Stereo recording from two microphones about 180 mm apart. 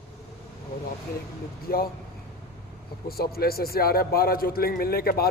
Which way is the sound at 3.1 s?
55° left (ahead or behind).